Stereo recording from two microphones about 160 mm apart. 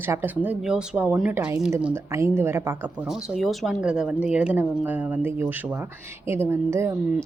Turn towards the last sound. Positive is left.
turn(degrees=-15)  # may be behind; listen again after turning